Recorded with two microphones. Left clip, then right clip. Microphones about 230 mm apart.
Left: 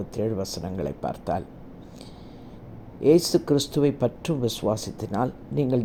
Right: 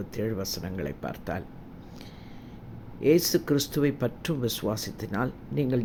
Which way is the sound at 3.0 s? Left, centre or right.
Centre.